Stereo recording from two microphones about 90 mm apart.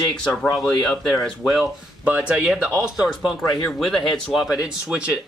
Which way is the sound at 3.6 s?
5° left (ahead or behind).